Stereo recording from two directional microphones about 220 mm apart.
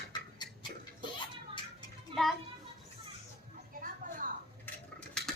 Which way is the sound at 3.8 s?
40° right (ahead or behind).